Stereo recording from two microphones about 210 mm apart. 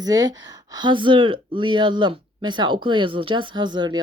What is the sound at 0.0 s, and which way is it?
Speech, 20° right (ahead or behind).